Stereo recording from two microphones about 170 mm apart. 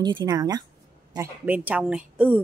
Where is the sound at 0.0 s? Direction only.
25° right (ahead or behind).